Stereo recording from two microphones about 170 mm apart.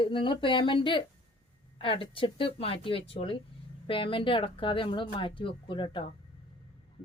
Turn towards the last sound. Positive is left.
turn(degrees=30)  # may be behind; listen again after turning